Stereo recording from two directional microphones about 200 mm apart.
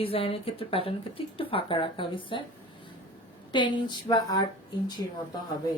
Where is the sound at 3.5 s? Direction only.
25° left (ahead or behind).